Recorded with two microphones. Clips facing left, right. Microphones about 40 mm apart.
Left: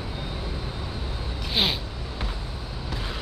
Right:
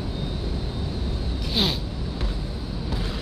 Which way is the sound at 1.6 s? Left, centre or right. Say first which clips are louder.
Even; centre.